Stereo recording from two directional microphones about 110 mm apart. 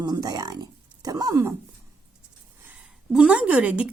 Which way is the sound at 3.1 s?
5° right (ahead or behind).